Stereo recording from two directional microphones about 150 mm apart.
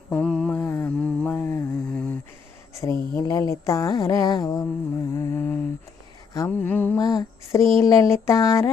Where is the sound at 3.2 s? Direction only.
25° left (ahead or behind).